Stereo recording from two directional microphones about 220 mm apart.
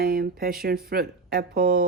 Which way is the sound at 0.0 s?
45° right (ahead or behind).